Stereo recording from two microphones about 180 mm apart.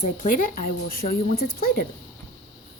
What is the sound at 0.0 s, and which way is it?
Speech, 45° left (ahead or behind).